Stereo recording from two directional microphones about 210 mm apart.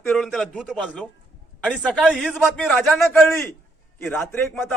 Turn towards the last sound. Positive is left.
turn(degrees=5)  # may be behind; listen again after turning